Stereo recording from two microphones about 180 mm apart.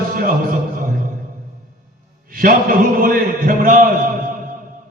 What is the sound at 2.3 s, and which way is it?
A man's voice, 55° right (ahead or behind).